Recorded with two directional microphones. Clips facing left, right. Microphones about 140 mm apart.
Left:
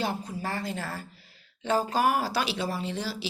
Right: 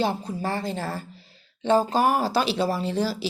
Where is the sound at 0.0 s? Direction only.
30° right (ahead or behind).